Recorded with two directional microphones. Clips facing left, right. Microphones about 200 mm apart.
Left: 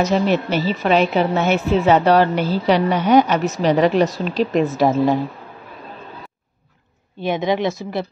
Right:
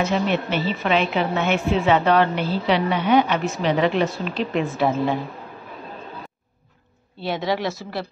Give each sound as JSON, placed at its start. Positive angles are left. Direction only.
{"t": 0.0, "sound": "a woman's voice", "side_deg": 40}
{"t": 7.2, "sound": "a woman's voice", "side_deg": 15}